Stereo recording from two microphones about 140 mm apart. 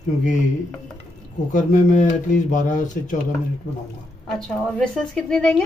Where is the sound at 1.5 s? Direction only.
60° left (ahead or behind).